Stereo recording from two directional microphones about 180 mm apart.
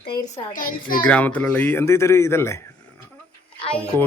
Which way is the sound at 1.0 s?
10° left (ahead or behind).